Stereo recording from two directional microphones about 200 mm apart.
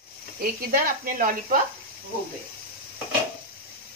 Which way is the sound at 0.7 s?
45° right (ahead or behind).